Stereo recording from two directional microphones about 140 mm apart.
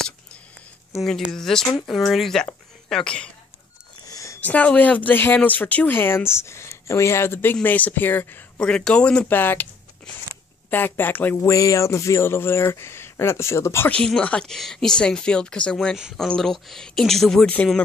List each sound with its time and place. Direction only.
1.0 s speech: 5° left (ahead or behind)
4.1 s a sound: 25° left (ahead or behind)
4.4 s speech: 10° left (ahead or behind)
10.7 s speech: 15° left (ahead or behind)